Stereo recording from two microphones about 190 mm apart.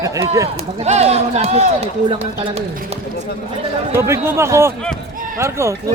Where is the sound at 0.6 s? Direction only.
35° right (ahead or behind).